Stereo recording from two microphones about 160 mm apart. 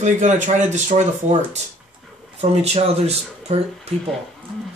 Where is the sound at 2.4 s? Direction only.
40° right (ahead or behind).